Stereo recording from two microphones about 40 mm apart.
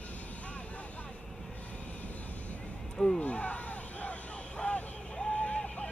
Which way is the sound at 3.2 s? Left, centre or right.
Left.